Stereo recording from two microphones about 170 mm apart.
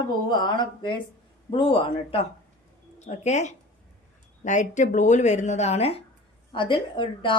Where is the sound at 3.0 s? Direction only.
45° left (ahead or behind).